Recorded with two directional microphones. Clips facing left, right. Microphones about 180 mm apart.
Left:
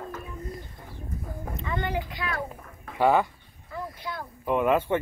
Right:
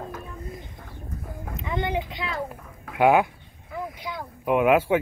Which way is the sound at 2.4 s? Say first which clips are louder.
Right 2 dB; 5° right (ahead or behind).